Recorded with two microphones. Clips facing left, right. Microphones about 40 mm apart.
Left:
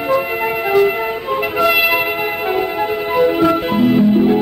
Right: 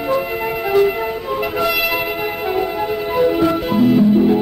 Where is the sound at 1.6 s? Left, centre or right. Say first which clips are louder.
Left 6 dB; left.